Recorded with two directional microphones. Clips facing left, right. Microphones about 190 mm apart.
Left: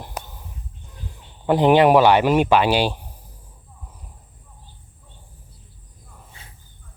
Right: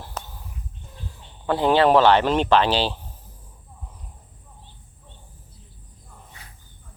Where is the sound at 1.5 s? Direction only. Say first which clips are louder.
Left 4 dB; 15° left (ahead or behind).